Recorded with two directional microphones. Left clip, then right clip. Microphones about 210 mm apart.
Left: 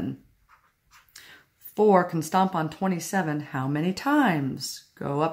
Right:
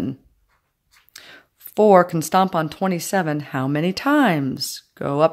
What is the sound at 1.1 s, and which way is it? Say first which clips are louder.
Speech: right 7 dB; 45° right (ahead or behind).